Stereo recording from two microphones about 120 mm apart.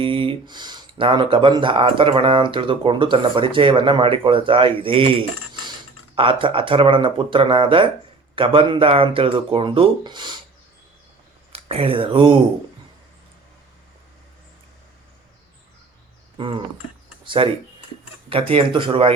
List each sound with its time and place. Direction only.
0.0 s speech: 45° right (ahead or behind)
6.1 s speech: 45° right (ahead or behind)
11.5 s speech: 50° right (ahead or behind)
16.4 s speech: 45° right (ahead or behind)